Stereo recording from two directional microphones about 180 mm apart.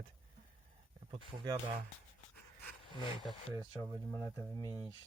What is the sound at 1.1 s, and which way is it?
Speech, 20° right (ahead or behind).